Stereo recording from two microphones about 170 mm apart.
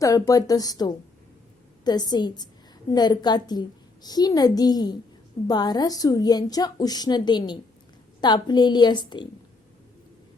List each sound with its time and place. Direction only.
0.0 s a woman's voice: 20° left (ahead or behind)